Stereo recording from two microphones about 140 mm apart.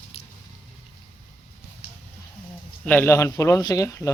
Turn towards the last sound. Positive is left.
turn(degrees=20)  # may be behind; listen again after turning